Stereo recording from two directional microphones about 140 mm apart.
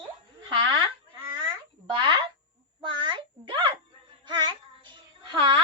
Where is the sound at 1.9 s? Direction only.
35° right (ahead or behind).